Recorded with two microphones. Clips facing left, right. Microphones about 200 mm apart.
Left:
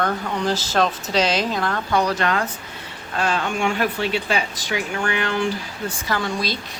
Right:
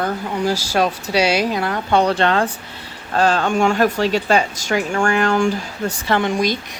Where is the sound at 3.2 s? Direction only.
40° right (ahead or behind).